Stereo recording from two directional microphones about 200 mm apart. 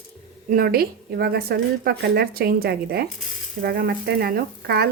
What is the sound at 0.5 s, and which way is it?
A woman's voice, 50° right (ahead or behind).